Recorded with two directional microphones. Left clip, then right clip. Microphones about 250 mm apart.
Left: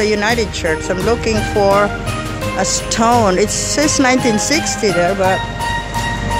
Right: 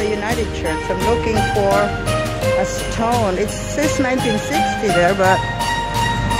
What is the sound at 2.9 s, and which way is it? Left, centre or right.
Speech, centre.